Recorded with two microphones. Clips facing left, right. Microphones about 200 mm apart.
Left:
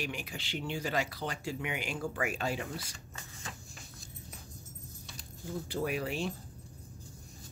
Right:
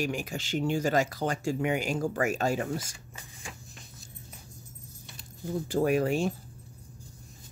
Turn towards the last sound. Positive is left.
turn(degrees=-45)  # may be behind; listen again after turning